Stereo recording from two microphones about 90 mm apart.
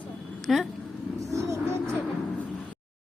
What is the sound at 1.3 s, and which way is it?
Vehicle, 35° right (ahead or behind).